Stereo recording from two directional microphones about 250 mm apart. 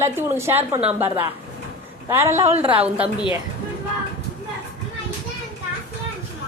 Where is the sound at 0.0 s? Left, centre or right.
Centre.